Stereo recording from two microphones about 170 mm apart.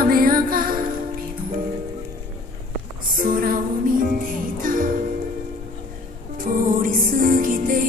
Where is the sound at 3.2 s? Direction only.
55° right (ahead or behind).